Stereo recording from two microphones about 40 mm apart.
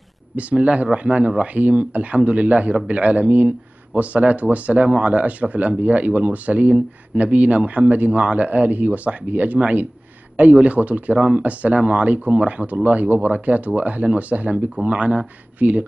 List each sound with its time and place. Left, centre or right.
0.4 s speech: right